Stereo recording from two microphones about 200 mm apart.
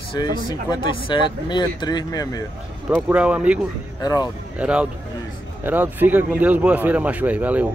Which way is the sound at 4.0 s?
20° left (ahead or behind).